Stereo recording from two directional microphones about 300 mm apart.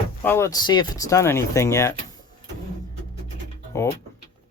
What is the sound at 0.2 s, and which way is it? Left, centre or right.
Speech, centre.